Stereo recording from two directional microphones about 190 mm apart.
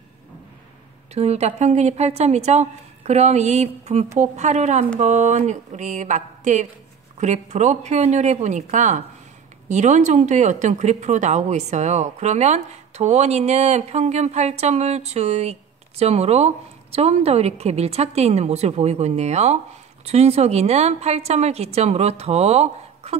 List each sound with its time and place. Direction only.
1.1 s speech: 35° right (ahead or behind)